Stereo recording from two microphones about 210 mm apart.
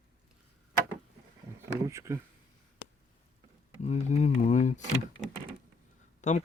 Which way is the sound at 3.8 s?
35° left (ahead or behind).